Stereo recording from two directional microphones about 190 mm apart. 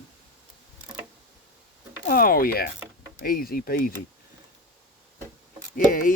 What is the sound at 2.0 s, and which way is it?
Speech, 50° left (ahead or behind).